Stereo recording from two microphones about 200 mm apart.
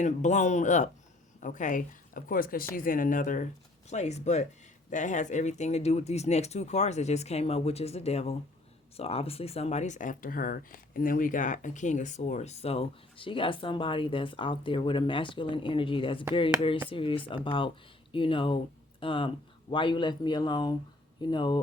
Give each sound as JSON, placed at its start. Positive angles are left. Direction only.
{"t": 0.0, "sound": "speech", "side_deg": 35}